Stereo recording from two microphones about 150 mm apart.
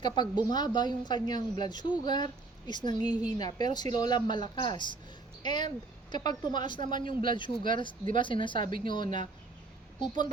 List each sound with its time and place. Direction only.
0.0 s a woman's voice: 30° left (ahead or behind)